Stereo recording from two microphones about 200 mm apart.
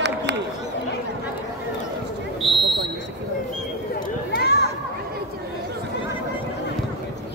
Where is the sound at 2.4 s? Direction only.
Centre (ahead or behind).